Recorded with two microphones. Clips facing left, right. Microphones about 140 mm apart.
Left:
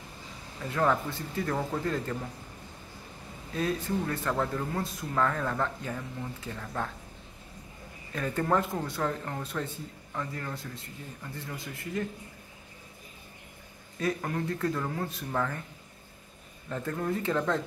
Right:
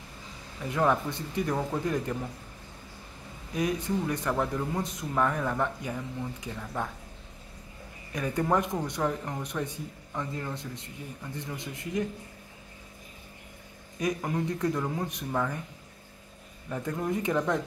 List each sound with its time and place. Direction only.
0.7 s speech: 15° right (ahead or behind)
3.5 s speech: 15° right (ahead or behind)
8.1 s speech: 15° right (ahead or behind)
13.9 s speech: 15° right (ahead or behind)
16.6 s speech: 15° right (ahead or behind)